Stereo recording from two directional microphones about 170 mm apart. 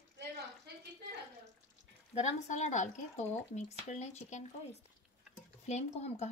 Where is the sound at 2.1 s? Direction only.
40° left (ahead or behind).